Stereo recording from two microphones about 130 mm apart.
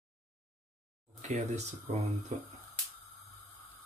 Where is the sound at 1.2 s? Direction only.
65° right (ahead or behind).